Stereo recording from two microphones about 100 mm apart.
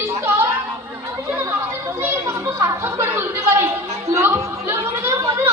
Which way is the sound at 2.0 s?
25° right (ahead or behind).